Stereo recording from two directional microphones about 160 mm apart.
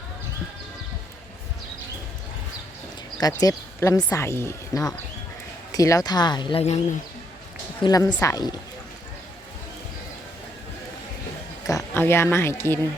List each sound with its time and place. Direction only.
3.4 s speech: 20° left (ahead or behind); by 6.7 s 35° left (ahead or behind)
7.8 s a woman's voice: 25° left (ahead or behind)
11.6 s speech: 20° left (ahead or behind)